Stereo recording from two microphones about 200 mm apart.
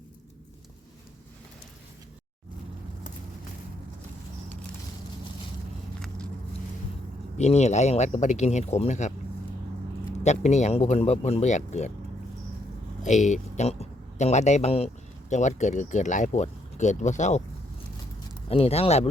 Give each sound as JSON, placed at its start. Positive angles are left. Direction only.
{"t": 7.3, "sound": "speech", "side_deg": 35}
{"t": 10.2, "sound": "speech", "side_deg": 35}
{"t": 13.0, "sound": "speech", "side_deg": 35}
{"t": 18.4, "sound": "speech", "side_deg": 30}